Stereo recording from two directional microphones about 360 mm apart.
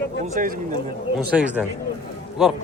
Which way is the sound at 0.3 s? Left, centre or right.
Right.